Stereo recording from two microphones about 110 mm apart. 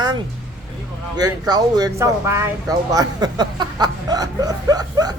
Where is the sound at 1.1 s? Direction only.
40° right (ahead or behind).